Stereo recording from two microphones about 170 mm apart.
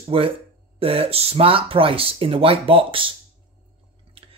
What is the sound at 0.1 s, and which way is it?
Speech, 30° right (ahead or behind).